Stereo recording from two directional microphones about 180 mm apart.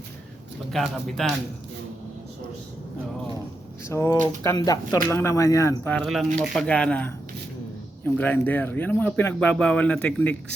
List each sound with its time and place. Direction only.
0.7 s speech: centre (ahead or behind)
3.8 s speech: 15° left (ahead or behind)